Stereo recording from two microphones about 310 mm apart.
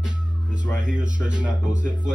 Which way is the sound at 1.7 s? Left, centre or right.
Right.